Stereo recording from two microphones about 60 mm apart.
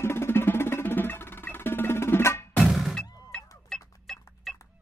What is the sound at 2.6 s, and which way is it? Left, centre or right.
Thunk, centre.